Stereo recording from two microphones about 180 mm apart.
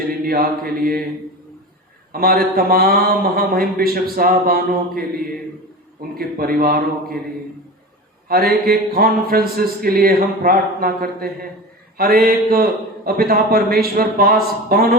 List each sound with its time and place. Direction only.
0.3 s speech: 55° right (ahead or behind)
2.1 s speech: 55° right (ahead or behind)
6.1 s speech: 55° right (ahead or behind)
8.3 s speech: 55° right (ahead or behind)